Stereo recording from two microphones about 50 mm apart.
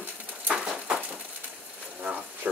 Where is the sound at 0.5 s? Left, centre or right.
Centre.